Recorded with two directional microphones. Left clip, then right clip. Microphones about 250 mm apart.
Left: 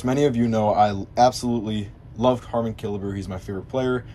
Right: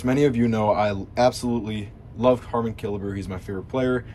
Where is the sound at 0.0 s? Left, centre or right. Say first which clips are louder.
Even; centre.